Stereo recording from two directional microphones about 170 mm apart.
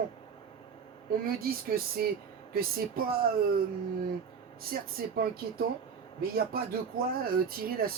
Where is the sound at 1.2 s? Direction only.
60° right (ahead or behind).